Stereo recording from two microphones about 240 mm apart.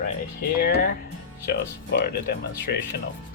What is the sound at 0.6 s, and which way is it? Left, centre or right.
Speech, left.